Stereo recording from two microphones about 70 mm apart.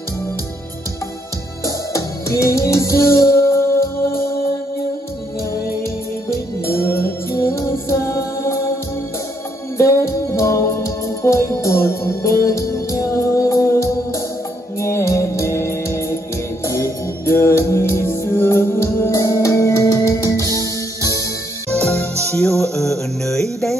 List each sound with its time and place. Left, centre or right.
2.0 s music: left
6.6 s music: left
9.8 s music: left
21.7 s music: left
22.6 s music: centre